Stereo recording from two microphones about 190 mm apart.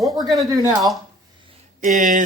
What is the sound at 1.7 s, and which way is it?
Speech, 40° right (ahead or behind).